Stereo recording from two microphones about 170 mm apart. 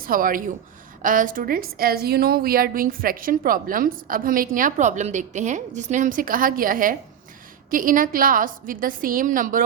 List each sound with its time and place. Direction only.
0.0 s a woman's voice: 55° right (ahead or behind)